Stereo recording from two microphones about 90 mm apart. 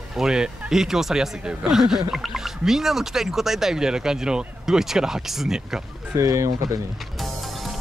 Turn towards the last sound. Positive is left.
turn(degrees=0)  # may be behind; listen again after turning